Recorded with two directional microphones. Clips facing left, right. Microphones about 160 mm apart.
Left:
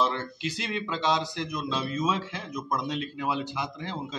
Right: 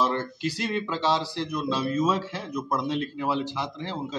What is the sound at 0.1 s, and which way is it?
Speech, 40° right (ahead or behind).